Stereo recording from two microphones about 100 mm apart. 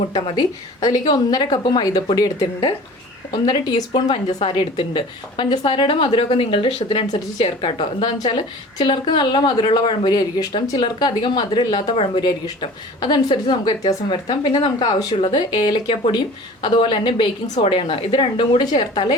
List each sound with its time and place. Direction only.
0.3 s a woman's voice: 40° left (ahead or behind)
4.5 s a woman's voice: 55° left (ahead or behind)
10.1 s a woman's voice: 45° left (ahead or behind)
15.1 s a woman's voice: 55° left (ahead or behind)
18.6 s a woman's voice: 45° left (ahead or behind)